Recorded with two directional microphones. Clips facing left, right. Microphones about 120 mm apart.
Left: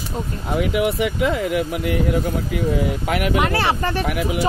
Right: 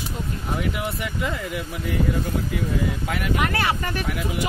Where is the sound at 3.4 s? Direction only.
30° left (ahead or behind).